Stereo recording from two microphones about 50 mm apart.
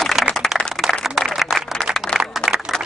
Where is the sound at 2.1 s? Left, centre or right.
Left.